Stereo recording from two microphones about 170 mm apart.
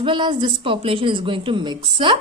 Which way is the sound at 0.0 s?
30° right (ahead or behind).